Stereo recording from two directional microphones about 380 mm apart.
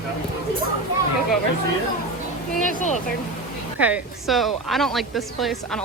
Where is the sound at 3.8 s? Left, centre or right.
Centre.